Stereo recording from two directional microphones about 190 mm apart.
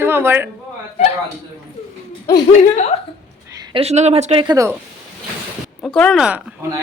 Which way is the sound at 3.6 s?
30° right (ahead or behind).